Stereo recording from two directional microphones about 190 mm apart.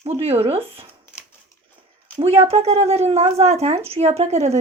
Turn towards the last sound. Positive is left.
turn(degrees=-35)  # may be behind; listen again after turning